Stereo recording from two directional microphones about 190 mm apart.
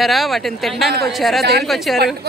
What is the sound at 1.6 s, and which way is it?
Speech, centre (ahead or behind).